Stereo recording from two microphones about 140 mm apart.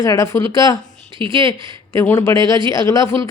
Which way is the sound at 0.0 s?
25° left (ahead or behind).